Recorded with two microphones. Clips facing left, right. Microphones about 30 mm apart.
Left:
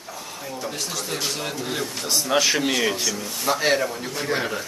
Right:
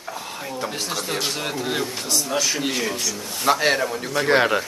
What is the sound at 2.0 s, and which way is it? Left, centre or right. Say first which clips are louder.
Speech: even; centre.